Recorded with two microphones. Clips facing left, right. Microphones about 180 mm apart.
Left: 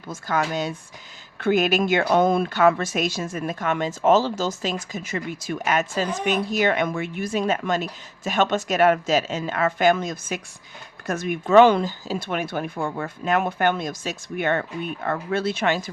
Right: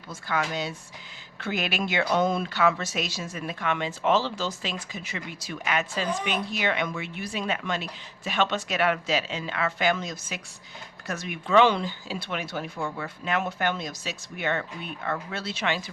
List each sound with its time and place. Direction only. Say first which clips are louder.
0.1 s speech: left 4 dB; 45° left (ahead or behind)